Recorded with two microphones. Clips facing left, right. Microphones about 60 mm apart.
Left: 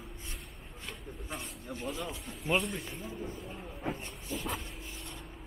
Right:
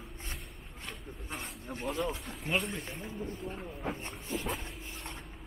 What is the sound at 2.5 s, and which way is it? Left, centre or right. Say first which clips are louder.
Speech: left 2 dB; centre.